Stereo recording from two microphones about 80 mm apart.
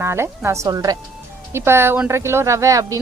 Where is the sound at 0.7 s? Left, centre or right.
Right.